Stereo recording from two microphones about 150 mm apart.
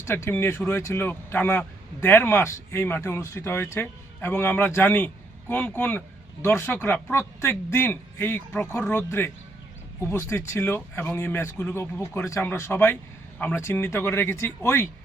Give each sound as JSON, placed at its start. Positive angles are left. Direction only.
{"t": 0.0, "sound": "speech", "side_deg": 15}